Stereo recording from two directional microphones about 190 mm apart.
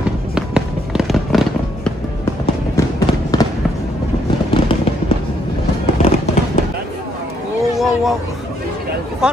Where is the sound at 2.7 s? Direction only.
20° left (ahead or behind).